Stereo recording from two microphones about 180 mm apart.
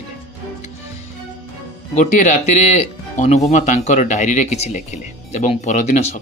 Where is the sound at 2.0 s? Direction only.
45° left (ahead or behind).